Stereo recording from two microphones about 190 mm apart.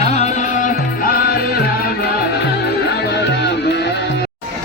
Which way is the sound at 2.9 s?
60° left (ahead or behind).